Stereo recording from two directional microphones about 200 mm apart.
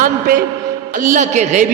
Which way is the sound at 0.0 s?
45° right (ahead or behind).